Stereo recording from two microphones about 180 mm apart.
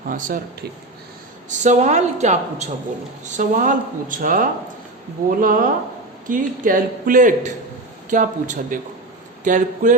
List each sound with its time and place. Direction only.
0.1 s speech: 50° right (ahead or behind)
1.5 s a woman's voice: 40° right (ahead or behind)